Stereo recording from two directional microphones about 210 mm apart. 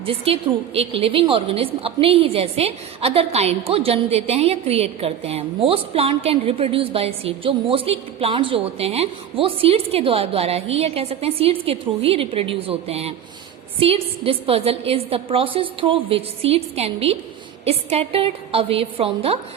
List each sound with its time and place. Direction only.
0.0 s a woman's voice: 25° right (ahead or behind)